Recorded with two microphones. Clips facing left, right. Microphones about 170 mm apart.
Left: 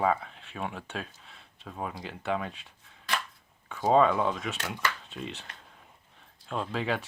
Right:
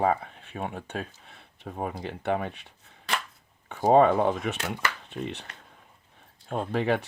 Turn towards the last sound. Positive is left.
turn(degrees=-60)  # may be behind; listen again after turning